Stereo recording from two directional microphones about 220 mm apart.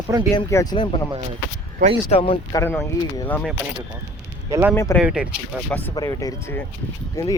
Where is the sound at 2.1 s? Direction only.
25° left (ahead or behind).